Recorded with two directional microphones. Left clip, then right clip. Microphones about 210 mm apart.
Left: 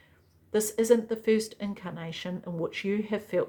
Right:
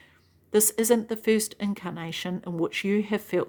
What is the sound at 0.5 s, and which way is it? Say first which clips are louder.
A woman's voice: right 1 dB; 55° right (ahead or behind).